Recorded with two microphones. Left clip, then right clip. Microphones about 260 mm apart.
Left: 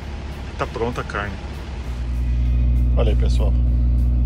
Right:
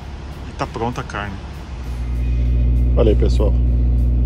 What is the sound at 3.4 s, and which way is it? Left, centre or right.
Speech, right.